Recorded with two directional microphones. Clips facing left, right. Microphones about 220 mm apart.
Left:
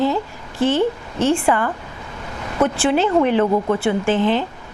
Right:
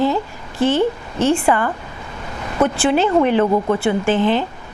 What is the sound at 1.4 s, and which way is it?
Speech, 20° right (ahead or behind).